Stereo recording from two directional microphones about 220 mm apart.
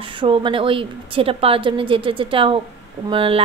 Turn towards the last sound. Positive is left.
turn(degrees=-25)  # may be behind; listen again after turning